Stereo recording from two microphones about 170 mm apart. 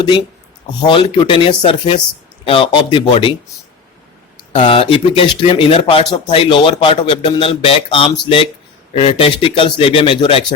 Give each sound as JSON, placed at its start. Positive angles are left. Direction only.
{"t": 0.8, "sound": "speech", "side_deg": 25}
{"t": 4.5, "sound": "speech", "side_deg": 35}